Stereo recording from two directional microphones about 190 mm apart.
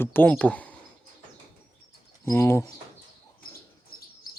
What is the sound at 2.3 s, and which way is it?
Speech, 15° left (ahead or behind).